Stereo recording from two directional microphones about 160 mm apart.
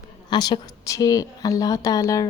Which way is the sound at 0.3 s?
25° left (ahead or behind).